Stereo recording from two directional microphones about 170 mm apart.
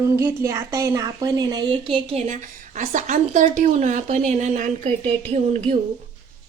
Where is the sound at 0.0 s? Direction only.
15° right (ahead or behind); by 5.7 s 40° right (ahead or behind).